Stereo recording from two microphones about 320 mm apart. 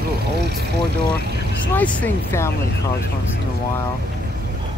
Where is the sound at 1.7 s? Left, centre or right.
Centre.